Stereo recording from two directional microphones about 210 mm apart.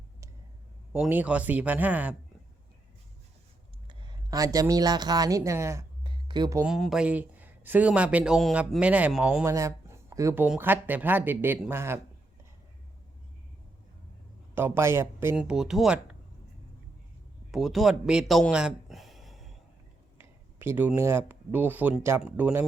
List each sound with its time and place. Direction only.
0.9 s a man's voice: 5° right (ahead or behind)
3.8 s speech: 20° right (ahead or behind)
6.7 s a man's voice: centre (ahead or behind)
14.5 s a man's voice: 10° right (ahead or behind)
17.5 s a man's voice: centre (ahead or behind)
20.1 s speech: 10° right (ahead or behind)